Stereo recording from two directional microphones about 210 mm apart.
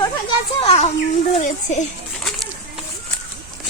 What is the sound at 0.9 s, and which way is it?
Speech, 35° left (ahead or behind).